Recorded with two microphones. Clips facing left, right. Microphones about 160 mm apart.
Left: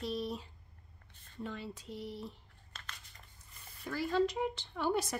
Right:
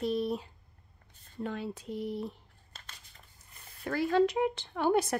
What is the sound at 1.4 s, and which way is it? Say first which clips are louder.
Speech: right 6 dB; 55° right (ahead or behind).